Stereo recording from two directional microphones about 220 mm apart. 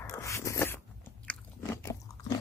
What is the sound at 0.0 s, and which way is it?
Zipper, 15° left (ahead or behind).